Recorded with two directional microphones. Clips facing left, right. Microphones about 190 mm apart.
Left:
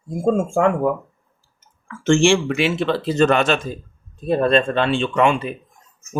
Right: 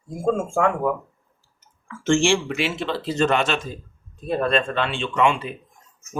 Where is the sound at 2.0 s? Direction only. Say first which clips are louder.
Left 4 dB; 65° left (ahead or behind).